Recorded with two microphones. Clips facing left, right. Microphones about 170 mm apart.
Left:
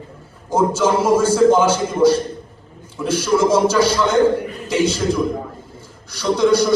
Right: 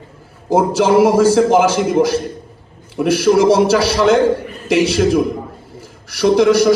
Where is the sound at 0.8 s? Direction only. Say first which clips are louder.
Right 6 dB; 85° right.